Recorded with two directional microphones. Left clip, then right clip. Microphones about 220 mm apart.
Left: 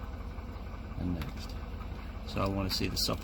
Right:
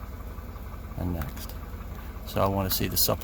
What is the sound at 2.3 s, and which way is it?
Speech, 50° right (ahead or behind).